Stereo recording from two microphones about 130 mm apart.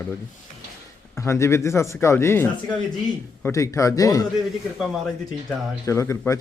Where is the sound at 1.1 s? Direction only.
20° left (ahead or behind).